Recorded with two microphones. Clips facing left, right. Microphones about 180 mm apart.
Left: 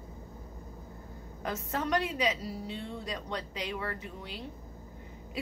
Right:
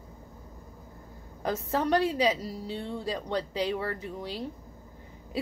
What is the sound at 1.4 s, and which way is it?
A woman's voice, 35° right (ahead or behind).